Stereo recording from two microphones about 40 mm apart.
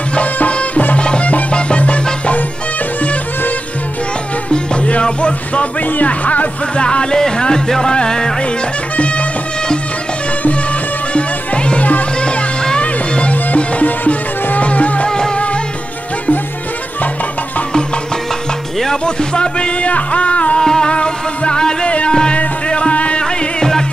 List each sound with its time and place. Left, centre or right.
0.1 s music: left
3.0 s music: left
6.8 s speech: left
7.2 s music: centre
8.9 s music: left
11.1 s music: left
15.0 s music: centre
15.3 s music: left
19.0 s music: left
20.5 s music: centre
23.6 s music: centre